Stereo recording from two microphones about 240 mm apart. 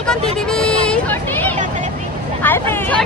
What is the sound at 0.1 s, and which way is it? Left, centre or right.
Vehicle, centre.